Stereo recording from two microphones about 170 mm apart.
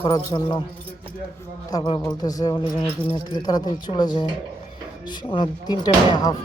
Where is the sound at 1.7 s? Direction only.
25° left (ahead or behind).